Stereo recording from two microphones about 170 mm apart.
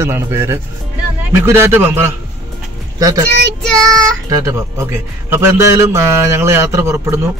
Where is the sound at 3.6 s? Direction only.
5° left (ahead or behind).